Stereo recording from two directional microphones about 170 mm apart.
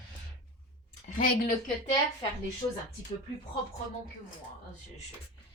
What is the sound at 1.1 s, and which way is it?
Speech, 55° left (ahead or behind).